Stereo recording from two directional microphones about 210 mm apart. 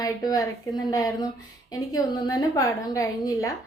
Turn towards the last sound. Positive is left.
turn(degrees=15)  # may be behind; listen again after turning